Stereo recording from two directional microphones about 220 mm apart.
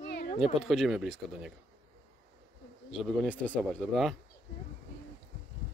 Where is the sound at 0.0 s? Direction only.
45° left (ahead or behind).